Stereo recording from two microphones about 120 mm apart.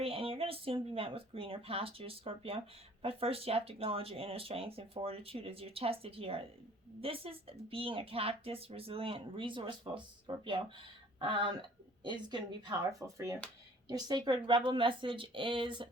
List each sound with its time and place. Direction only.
0.0 s speech: 50° right (ahead or behind)